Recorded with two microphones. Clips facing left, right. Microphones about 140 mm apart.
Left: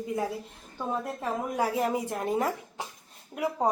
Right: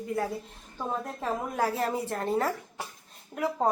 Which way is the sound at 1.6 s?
10° left (ahead or behind).